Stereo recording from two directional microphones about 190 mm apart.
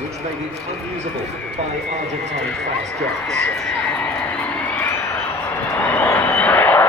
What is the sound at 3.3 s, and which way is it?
Speech, 5° left (ahead or behind).